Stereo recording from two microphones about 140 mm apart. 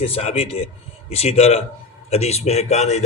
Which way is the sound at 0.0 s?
45° left (ahead or behind).